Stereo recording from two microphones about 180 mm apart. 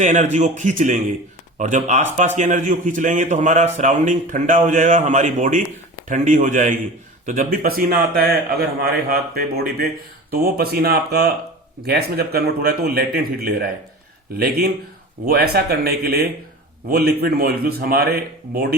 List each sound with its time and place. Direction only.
0.0 s a man's voice: 40° right (ahead or behind)
15.3 s a man's voice: 60° right (ahead or behind)